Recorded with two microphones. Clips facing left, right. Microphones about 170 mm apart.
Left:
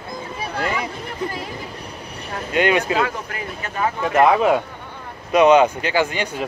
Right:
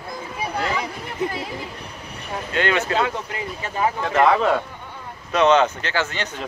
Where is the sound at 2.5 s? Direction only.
15° left (ahead or behind).